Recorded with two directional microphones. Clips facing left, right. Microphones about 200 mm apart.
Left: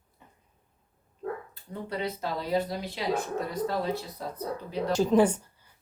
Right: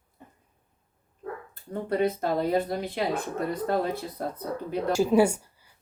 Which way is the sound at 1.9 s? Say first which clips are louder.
Right 7 dB; 50° right (ahead or behind).